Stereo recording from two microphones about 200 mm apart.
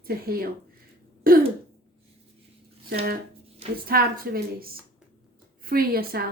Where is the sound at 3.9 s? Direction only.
50° right (ahead or behind).